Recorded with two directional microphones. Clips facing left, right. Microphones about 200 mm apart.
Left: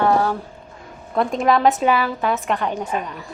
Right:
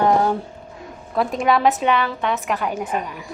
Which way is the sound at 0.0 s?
20° right (ahead or behind).